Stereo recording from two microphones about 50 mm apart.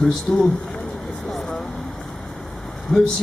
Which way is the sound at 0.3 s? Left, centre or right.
Centre.